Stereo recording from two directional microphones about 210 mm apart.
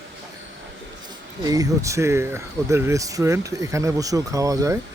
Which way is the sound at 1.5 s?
15° right (ahead or behind).